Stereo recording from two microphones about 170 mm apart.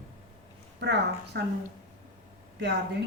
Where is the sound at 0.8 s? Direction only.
90° right.